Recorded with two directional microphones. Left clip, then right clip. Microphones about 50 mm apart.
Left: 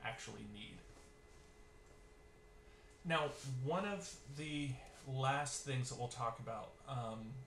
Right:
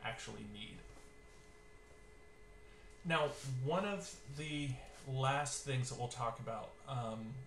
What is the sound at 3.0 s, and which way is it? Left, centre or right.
Speech, right.